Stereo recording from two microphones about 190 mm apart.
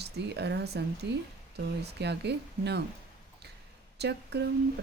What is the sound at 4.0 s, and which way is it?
Speech, 60° right (ahead or behind).